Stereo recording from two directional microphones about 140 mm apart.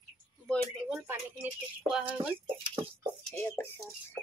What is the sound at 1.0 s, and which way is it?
Speech, 15° right (ahead or behind).